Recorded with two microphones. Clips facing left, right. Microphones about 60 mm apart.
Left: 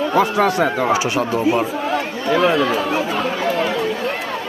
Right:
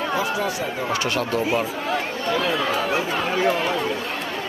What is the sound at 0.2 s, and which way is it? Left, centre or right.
Speech, left.